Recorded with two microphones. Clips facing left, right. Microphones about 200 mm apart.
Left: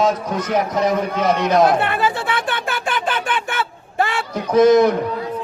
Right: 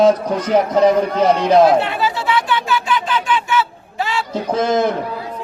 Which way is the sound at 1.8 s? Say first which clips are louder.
Right 1 dB; 55° left (ahead or behind).